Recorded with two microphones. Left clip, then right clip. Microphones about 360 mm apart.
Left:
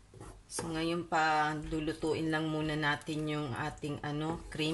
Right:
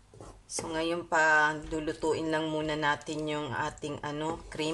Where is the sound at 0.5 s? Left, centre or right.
Centre.